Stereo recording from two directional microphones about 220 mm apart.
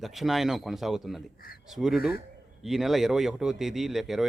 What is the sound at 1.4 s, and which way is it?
Speech, 40° left (ahead or behind).